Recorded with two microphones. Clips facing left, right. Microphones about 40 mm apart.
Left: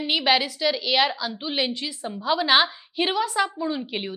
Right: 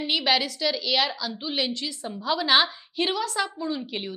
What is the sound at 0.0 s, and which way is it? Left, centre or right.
A woman's voice, centre.